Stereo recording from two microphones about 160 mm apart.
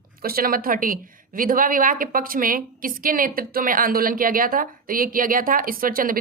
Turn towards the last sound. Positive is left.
turn(degrees=-60)  # may be behind; listen again after turning